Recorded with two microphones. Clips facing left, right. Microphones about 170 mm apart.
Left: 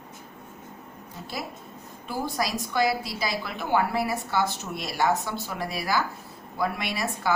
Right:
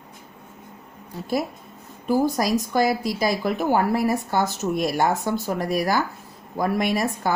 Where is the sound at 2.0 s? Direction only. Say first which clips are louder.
Right 9 dB; 45° right (ahead or behind).